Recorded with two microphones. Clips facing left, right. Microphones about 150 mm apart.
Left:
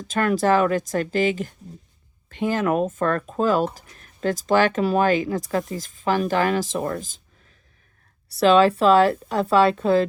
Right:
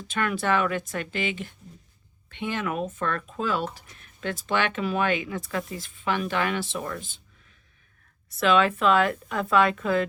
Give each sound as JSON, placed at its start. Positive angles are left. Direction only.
{"t": 0.1, "sound": "speech", "side_deg": 40}